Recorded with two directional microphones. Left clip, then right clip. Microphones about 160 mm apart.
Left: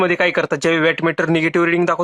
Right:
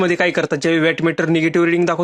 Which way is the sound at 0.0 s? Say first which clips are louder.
Left 1 dB; 25° right (ahead or behind).